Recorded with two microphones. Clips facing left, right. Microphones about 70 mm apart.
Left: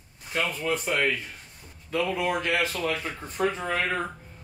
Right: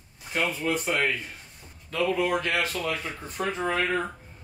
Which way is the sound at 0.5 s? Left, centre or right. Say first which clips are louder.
Even; centre.